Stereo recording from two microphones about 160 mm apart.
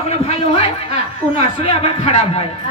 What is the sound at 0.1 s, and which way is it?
A man's voice, 40° left (ahead or behind).